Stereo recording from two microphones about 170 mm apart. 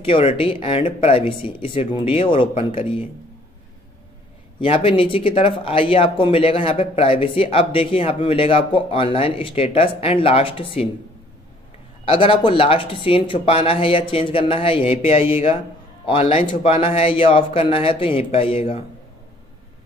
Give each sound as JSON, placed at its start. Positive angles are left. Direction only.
{"t": 0.0, "sound": "speech", "side_deg": 35}
{"t": 4.6, "sound": "speech", "side_deg": 35}
{"t": 12.0, "sound": "speech", "side_deg": 30}